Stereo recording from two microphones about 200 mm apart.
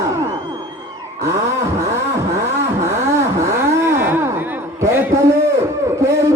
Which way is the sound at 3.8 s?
10° right (ahead or behind).